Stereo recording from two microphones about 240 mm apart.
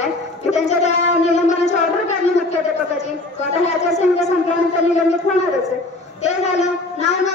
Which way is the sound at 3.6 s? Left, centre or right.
Left.